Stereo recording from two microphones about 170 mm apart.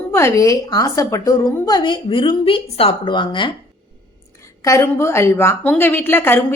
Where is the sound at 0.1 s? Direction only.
15° left (ahead or behind).